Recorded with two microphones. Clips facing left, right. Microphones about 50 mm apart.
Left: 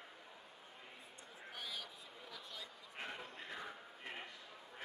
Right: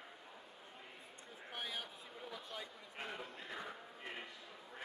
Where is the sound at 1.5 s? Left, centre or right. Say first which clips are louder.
Right 3 dB; right.